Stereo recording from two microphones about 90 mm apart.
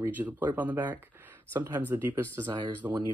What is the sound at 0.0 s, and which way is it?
Speech, 20° right (ahead or behind).